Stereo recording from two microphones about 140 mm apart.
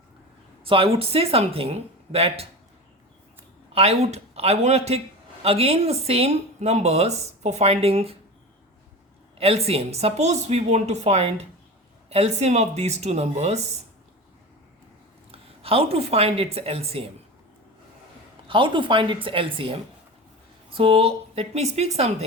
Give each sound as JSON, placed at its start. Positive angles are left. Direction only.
{"t": 0.6, "sound": "a man's voice", "side_deg": -40}
{"t": 3.7, "sound": "a man's voice", "side_deg": -45}
{"t": 9.4, "sound": "a man's voice", "side_deg": -45}
{"t": 15.3, "sound": "a woman's voice", "side_deg": -45}
{"t": 18.4, "sound": "a woman's voice", "side_deg": -35}